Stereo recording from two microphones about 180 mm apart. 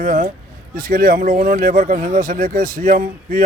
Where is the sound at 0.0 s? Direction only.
50° right (ahead or behind).